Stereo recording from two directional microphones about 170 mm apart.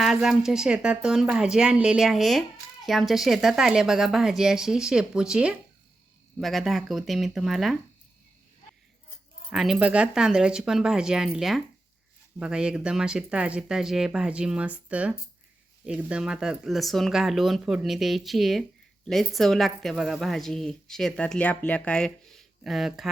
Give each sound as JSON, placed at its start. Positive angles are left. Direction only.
{"t": 0.0, "sound": "a woman's voice", "side_deg": 0}
{"t": 9.5, "sound": "a woman's voice", "side_deg": -5}